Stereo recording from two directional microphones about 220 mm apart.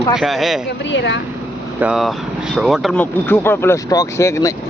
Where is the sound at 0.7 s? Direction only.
50° left (ahead or behind).